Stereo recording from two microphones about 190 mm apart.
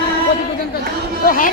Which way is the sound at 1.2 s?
45° left (ahead or behind).